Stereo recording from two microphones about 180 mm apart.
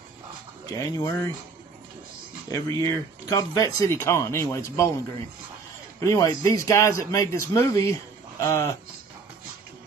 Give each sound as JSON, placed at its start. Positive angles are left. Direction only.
{"t": 0.7, "sound": "speech", "side_deg": 15}
{"t": 2.5, "sound": "speech", "side_deg": 20}
{"t": 5.9, "sound": "speech", "side_deg": 15}